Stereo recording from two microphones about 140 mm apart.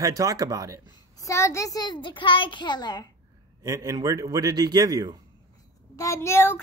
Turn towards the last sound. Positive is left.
turn(degrees=20)  # may be behind; listen again after turning